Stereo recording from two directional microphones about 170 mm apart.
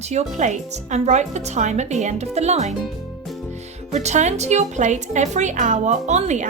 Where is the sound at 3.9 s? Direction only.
40° right (ahead or behind).